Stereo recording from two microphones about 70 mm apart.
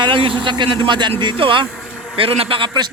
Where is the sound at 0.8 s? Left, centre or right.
Right.